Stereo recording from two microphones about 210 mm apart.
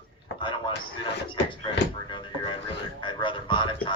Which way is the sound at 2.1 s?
20° left (ahead or behind).